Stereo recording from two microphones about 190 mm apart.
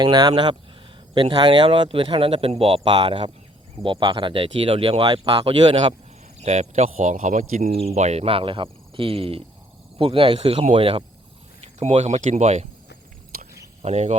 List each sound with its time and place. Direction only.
0.0 s speech: 25° right (ahead or behind)
13.3 s a sound: 50° right (ahead or behind)
13.8 s speech: 35° right (ahead or behind)